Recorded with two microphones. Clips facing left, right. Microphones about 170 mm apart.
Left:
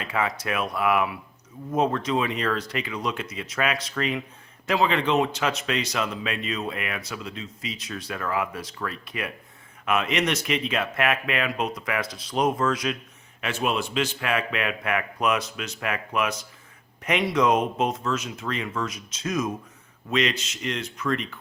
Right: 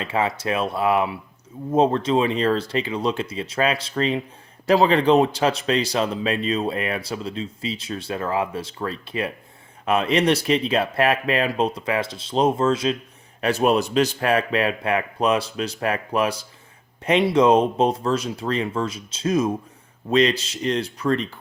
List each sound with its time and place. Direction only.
0.0 s a man's voice: 30° right (ahead or behind)
13.4 s a man's voice: 40° right (ahead or behind)